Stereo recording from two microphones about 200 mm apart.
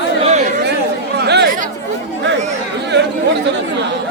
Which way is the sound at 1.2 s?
55° right (ahead or behind).